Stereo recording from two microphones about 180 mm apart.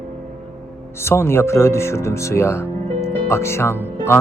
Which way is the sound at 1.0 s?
15° left (ahead or behind).